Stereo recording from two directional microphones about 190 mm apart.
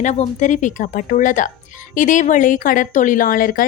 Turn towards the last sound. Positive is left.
turn(degrees=50)  # may be behind; listen again after turning